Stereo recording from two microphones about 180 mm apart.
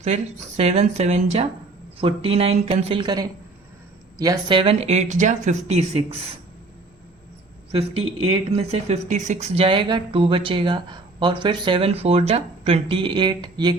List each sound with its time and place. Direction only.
0.0 s speech: 35° right (ahead or behind)
8.4 s speech: 35° right (ahead or behind)